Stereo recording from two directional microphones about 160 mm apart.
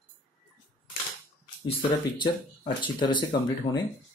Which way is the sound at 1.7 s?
30° left (ahead or behind).